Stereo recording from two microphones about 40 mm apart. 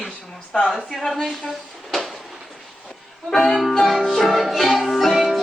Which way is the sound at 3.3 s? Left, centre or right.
Centre.